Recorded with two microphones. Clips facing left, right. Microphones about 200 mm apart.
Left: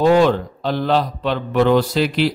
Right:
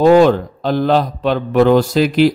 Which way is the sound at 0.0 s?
45° right (ahead or behind).